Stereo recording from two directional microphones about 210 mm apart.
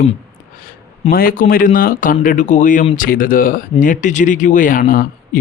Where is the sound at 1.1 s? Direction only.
45° left (ahead or behind).